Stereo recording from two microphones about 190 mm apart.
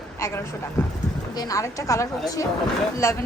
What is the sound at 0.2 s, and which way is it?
A woman's voice, 15° left (ahead or behind).